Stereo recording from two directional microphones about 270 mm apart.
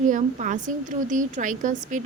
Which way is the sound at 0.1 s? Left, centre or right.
Right.